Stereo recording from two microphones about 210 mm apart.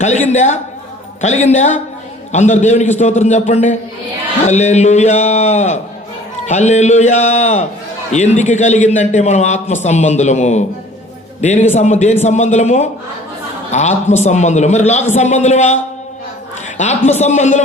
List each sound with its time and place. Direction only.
0.0 s a man's voice: 35° left (ahead or behind)